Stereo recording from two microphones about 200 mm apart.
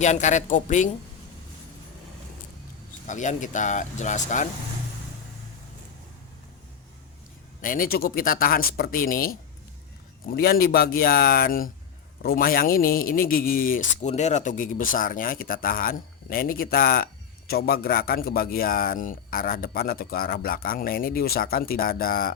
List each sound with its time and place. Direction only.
0.0 s speech: 35° left (ahead or behind)
3.1 s speech: 40° left (ahead or behind)
7.6 s a man's voice: 45° left (ahead or behind)